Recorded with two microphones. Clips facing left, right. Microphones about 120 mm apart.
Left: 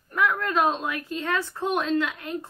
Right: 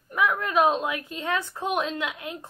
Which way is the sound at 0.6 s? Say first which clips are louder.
Right 4 dB; 20° right (ahead or behind).